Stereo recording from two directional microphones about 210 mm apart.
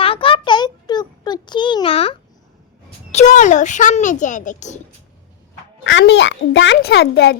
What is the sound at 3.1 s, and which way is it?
Speech, 35° left (ahead or behind).